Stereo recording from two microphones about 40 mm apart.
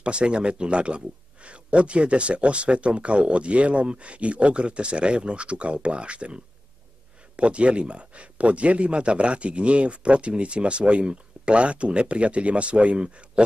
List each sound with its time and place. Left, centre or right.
0.0 s speech: right